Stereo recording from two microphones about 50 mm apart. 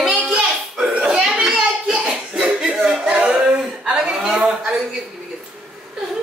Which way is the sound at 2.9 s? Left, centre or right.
Right.